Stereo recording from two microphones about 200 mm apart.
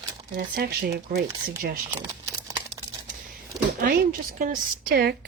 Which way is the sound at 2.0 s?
15° right (ahead or behind).